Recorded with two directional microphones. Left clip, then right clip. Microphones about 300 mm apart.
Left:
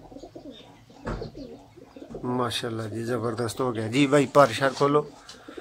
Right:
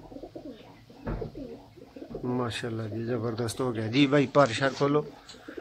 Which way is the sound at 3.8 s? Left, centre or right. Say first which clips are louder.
Left 2 dB; centre.